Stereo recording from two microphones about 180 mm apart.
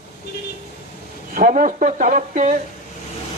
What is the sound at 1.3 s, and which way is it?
Speech, 50° right (ahead or behind).